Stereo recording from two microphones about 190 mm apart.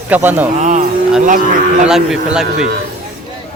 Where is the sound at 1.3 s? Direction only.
45° right (ahead or behind).